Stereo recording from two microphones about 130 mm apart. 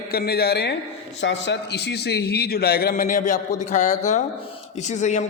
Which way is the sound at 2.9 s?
90° left.